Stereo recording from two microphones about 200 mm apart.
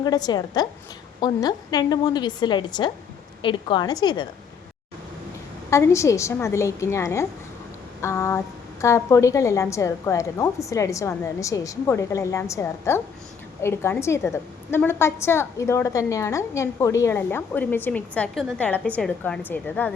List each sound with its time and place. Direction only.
0.0 s a woman's voice: 20° left (ahead or behind)
5.7 s a woman's voice: 15° left (ahead or behind)